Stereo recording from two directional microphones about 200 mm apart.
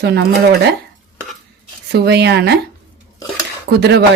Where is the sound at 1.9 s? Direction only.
55° right (ahead or behind).